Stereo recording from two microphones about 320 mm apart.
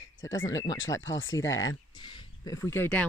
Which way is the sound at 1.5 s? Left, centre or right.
Left.